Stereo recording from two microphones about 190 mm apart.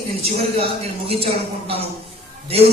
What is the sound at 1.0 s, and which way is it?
Speech, 30° right (ahead or behind).